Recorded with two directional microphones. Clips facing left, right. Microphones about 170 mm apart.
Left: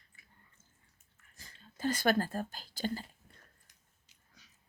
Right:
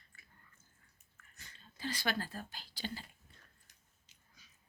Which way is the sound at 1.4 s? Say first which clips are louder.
Left 8 dB; 45° left (ahead or behind).